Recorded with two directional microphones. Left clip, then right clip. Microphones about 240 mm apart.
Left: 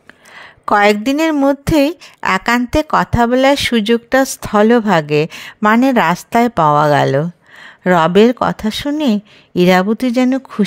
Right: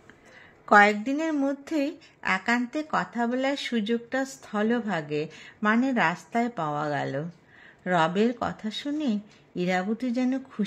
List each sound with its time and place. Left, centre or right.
0.4 s speech: left